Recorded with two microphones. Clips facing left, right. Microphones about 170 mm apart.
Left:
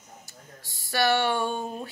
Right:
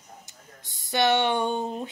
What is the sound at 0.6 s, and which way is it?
Speech, 20° right (ahead or behind).